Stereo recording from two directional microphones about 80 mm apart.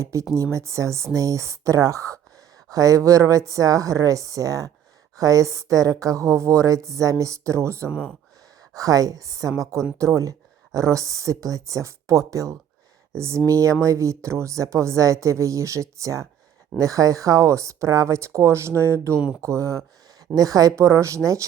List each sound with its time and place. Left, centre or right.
0.0 s a woman's voice: right
7.9 s speech: centre
8.7 s a woman's voice: right